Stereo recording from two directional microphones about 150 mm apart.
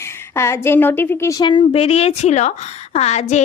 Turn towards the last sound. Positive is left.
turn(degrees=50)  # may be behind; listen again after turning